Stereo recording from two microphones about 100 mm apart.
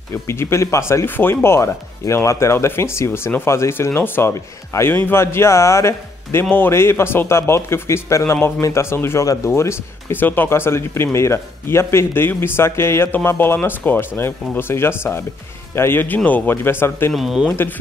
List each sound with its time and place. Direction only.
0.1 s speech: 25° left (ahead or behind)
17.1 s speech: 5° right (ahead or behind)